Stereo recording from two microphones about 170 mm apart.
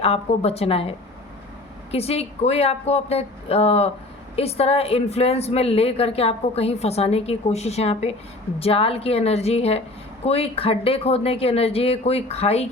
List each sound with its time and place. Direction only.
0.0 s a woman's voice: 35° left (ahead or behind)
1.9 s a woman's voice: 35° left (ahead or behind)